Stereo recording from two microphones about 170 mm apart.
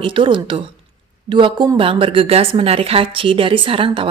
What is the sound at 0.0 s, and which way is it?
A woman's voice, 30° right (ahead or behind).